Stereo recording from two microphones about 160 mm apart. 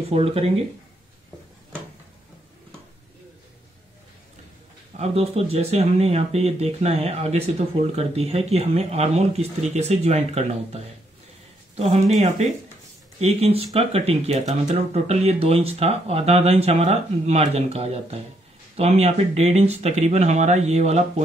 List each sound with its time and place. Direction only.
0.1 s speech: 40° right (ahead or behind)
4.9 s speech: 40° right (ahead or behind)